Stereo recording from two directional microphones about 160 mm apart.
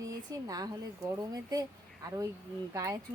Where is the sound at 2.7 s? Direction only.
20° right (ahead or behind).